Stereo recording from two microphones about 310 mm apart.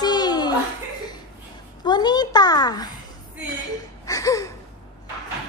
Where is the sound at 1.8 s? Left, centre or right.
Centre.